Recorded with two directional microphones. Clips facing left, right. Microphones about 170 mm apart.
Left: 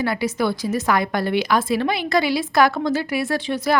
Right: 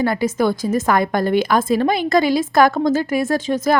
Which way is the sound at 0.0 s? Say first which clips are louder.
Right 4 dB; 45° right (ahead or behind).